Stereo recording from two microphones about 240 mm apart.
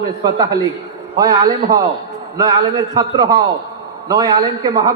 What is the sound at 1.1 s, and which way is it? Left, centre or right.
A man's voice, centre.